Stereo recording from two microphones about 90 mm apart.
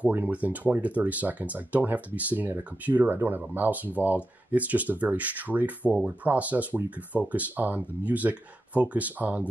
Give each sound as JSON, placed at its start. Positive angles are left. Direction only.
{"t": 0.0, "sound": "speech", "side_deg": -15}